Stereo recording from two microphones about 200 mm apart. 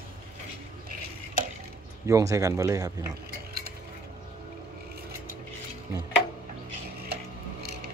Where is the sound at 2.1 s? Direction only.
15° right (ahead or behind).